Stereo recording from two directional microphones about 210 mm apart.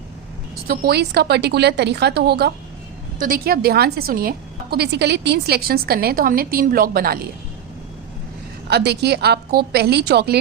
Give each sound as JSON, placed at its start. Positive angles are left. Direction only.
{"t": 0.7, "sound": "a woman's voice", "side_deg": -45}
{"t": 8.6, "sound": "a woman's voice", "side_deg": -50}